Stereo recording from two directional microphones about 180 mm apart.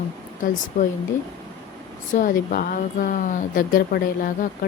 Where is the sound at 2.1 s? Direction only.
50° left (ahead or behind).